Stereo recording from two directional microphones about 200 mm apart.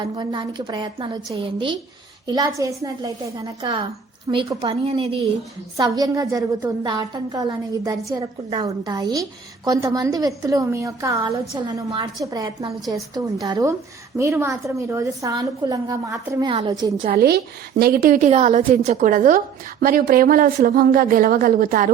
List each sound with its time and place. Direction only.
0.0 s a woman's voice: 25° right (ahead or behind)
5.7 s a woman's voice: 20° right (ahead or behind)
17.1 s a woman's voice: 50° right (ahead or behind)